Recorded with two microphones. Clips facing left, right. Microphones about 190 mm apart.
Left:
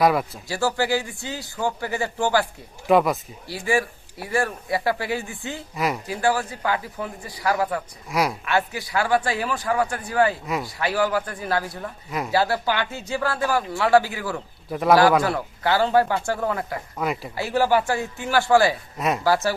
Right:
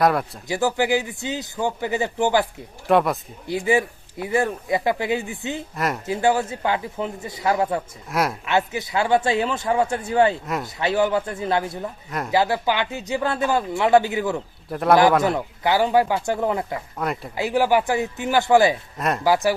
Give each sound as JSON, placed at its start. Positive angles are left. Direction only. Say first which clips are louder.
{"t": 0.0, "sound": "speech", "louder": "even", "side_deg": 0}
{"t": 0.4, "sound": "speech", "louder": "right 4 dB", "side_deg": -20}
{"t": 2.8, "sound": "speech", "louder": "even", "side_deg": 0}
{"t": 3.4, "sound": "speech", "louder": "right 3 dB", "side_deg": -20}
{"t": 5.7, "sound": "speech", "louder": "left 2 dB", "side_deg": 0}
{"t": 6.1, "sound": "speech", "louder": "right 6 dB", "side_deg": -25}
{"t": 8.1, "sound": "speech", "louder": "even", "side_deg": 0}
{"t": 8.4, "sound": "speech", "louder": "right 2 dB", "side_deg": -20}
{"t": 10.4, "sound": "speech", "louder": "even", "side_deg": 0}
{"t": 10.8, "sound": "speech", "louder": "right 3 dB", "side_deg": -20}
{"t": 14.7, "sound": "speech", "louder": "even", "side_deg": 0}
{"t": 15.2, "sound": "a man's voice", "louder": "right 2 dB", "side_deg": -20}
{"t": 18.9, "sound": "speech", "louder": "even", "side_deg": 0}
{"t": 19.2, "sound": "a man's voice", "louder": "right 3 dB", "side_deg": -15}